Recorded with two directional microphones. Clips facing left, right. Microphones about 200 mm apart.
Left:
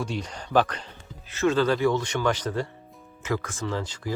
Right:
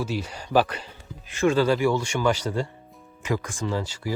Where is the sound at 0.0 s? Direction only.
5° right (ahead or behind).